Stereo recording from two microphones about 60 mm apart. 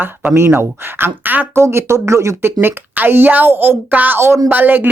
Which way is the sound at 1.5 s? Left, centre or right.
Right.